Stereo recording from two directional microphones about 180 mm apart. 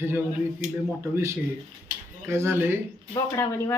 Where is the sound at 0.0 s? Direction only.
10° right (ahead or behind).